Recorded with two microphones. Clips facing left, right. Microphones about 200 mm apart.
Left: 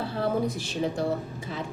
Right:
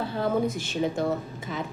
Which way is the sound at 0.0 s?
35° left (ahead or behind).